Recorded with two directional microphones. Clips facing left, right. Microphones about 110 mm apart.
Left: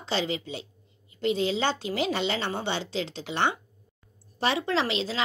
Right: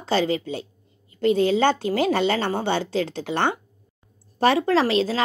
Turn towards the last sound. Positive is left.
turn(degrees=-45)  # may be behind; listen again after turning